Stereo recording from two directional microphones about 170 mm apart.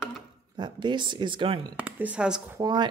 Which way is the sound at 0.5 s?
25° right (ahead or behind).